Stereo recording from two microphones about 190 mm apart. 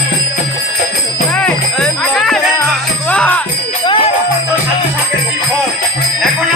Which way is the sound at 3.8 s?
25° left (ahead or behind).